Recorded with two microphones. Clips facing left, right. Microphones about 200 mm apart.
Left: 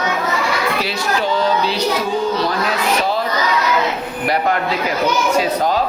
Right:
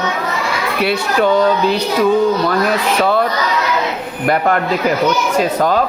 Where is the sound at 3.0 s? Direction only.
60° right (ahead or behind).